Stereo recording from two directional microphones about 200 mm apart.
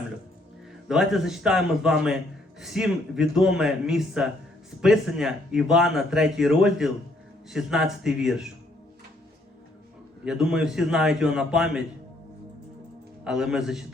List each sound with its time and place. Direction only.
0.9 s a man's voice: centre (ahead or behind)
10.2 s a man's voice: 5° right (ahead or behind)
13.2 s a man's voice: 5° right (ahead or behind)